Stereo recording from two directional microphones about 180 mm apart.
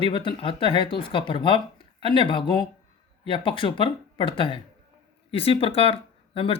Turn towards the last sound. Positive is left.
turn(degrees=30)  # may be behind; listen again after turning